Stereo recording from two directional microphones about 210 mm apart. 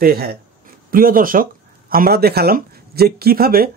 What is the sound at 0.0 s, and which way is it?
Speech, 45° right (ahead or behind).